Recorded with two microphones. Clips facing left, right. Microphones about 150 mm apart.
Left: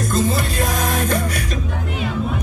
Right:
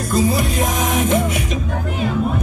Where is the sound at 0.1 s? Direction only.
10° right (ahead or behind).